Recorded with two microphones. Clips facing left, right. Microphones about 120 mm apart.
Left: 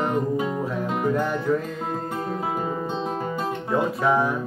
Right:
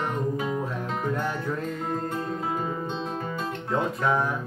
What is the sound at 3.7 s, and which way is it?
Music, 5° left (ahead or behind).